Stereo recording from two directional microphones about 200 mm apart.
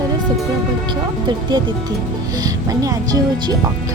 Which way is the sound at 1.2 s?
20° right (ahead or behind).